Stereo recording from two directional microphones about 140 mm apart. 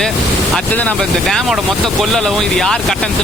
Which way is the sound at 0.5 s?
10° left (ahead or behind).